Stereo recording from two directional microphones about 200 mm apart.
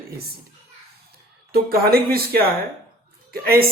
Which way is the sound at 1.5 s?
50° right (ahead or behind).